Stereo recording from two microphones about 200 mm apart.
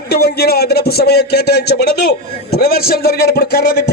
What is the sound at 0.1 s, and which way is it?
A man's voice, 50° left (ahead or behind).